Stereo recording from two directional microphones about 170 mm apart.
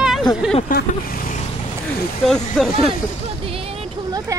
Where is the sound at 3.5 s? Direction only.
35° right (ahead or behind).